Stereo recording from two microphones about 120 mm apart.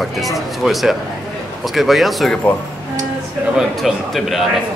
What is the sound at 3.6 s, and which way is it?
Speech, centre (ahead or behind).